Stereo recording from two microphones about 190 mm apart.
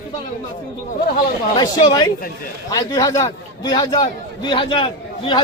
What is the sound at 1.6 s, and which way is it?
A man's voice, 20° left (ahead or behind).